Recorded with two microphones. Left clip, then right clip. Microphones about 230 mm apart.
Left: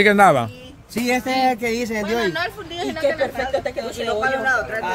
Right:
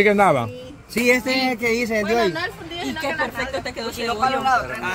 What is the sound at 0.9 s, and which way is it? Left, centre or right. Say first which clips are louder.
Speech: right 2 dB; centre.